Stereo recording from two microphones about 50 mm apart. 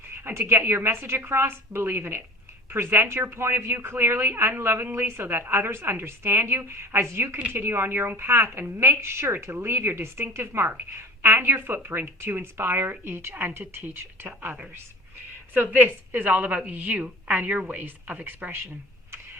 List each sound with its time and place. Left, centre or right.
0.1 s a woman's voice: right
9.0 s a woman's voice: right
11.2 s speech: right
15.5 s a woman's voice: right